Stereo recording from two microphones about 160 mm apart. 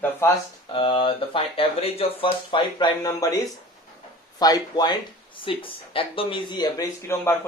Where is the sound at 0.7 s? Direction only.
30° left (ahead or behind).